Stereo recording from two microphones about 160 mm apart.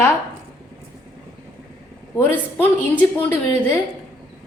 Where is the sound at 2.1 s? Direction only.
15° left (ahead or behind).